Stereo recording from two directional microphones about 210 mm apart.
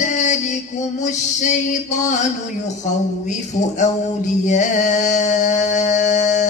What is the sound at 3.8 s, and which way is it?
Music, 35° left (ahead or behind).